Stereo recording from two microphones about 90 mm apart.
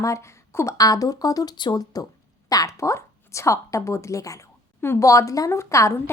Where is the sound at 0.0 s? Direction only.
35° left (ahead or behind).